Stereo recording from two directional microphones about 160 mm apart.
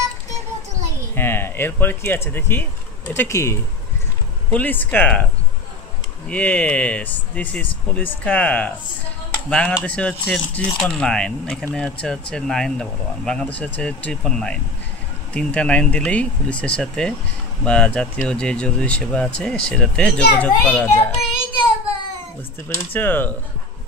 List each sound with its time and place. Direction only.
1.1 s speech: 15° left (ahead or behind)
6.2 s speech: 10° left (ahead or behind)
22.9 s speech: 10° left (ahead or behind)